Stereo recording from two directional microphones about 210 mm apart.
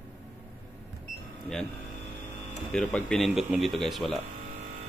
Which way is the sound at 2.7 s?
5° left (ahead or behind).